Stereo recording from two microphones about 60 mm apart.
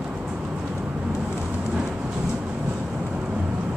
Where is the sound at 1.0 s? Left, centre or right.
Centre.